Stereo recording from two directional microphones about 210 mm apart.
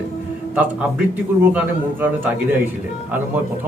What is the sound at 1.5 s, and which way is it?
A man's voice, 10° right (ahead or behind).